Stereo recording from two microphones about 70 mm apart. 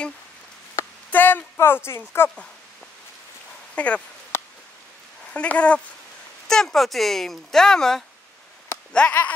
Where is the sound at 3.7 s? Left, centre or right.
Centre.